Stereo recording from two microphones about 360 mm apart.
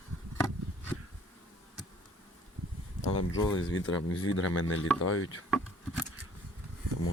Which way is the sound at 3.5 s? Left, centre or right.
Left.